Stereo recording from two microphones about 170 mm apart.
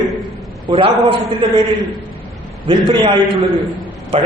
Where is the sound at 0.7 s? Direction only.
30° right (ahead or behind).